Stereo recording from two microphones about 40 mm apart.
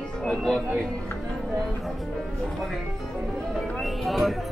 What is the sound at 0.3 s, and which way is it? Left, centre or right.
Speech, centre.